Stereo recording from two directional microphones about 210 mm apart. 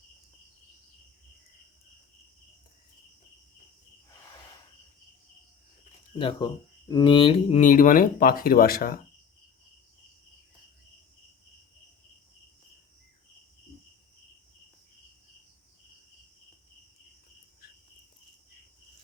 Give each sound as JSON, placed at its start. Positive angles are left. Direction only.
{"t": 6.1, "sound": "speech", "side_deg": 25}